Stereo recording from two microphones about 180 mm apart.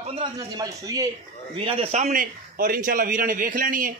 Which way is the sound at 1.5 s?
30° right (ahead or behind).